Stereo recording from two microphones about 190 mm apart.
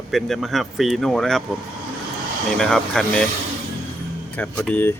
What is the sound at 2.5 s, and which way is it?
Speech, 5° left (ahead or behind).